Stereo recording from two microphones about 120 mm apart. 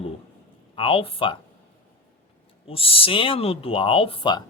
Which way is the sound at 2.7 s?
50° left (ahead or behind).